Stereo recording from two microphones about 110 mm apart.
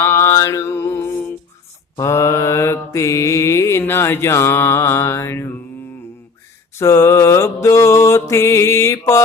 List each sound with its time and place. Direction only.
0.0 s mantra: 25° left (ahead or behind)
6.7 s mantra: 25° left (ahead or behind)